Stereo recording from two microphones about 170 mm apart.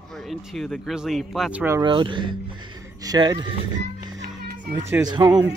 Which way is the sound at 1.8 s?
30° right (ahead or behind).